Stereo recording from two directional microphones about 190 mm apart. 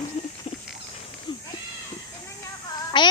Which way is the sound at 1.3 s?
25° left (ahead or behind).